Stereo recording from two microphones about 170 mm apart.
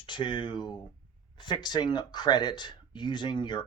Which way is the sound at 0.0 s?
30° left (ahead or behind).